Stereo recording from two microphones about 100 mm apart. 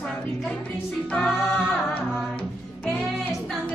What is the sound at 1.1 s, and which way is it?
Music, 5° left (ahead or behind).